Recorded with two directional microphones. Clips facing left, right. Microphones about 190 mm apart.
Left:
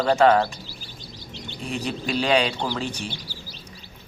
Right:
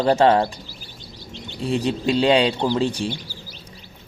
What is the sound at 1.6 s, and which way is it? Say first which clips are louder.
Speech: right 7 dB; 30° right (ahead or behind).